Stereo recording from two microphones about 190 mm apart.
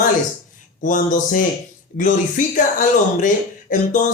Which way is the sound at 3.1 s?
45° left (ahead or behind).